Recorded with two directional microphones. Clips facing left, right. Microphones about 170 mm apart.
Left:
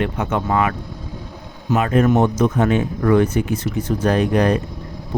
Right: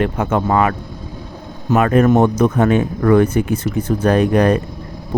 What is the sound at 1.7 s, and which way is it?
Speech, 55° right (ahead or behind).